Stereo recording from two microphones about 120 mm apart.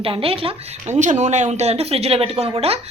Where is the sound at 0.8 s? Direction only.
80° right; by 2.8 s 55° right (ahead or behind).